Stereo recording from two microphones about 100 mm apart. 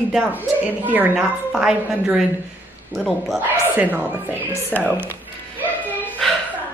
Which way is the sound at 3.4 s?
15° right (ahead or behind).